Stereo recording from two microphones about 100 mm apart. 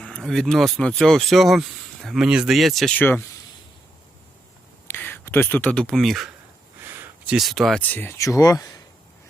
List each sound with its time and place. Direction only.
0.0 s speech: 5° left (ahead or behind)
2.9 s speech: 20° left (ahead or behind)
4.9 s speech: 20° left (ahead or behind); by 6.3 s centre (ahead or behind)
6.8 s a sound: 20° right (ahead or behind)
7.3 s speech: centre (ahead or behind)
7.8 s speech: 20° left (ahead or behind)
8.2 s speech: 35° left (ahead or behind)